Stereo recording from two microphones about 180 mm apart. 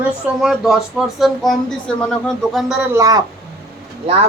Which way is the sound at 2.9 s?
20° right (ahead or behind).